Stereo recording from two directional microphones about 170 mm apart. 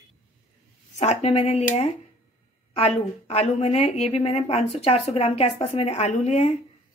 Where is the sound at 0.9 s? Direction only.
40° left (ahead or behind).